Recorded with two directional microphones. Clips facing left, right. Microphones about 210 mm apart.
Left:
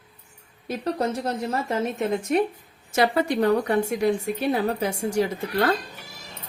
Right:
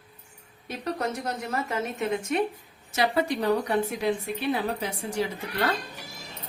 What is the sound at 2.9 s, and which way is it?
A woman's voice, 55° left (ahead or behind).